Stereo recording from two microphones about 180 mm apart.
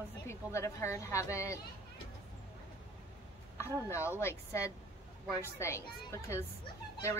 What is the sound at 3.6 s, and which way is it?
Speech, 15° left (ahead or behind).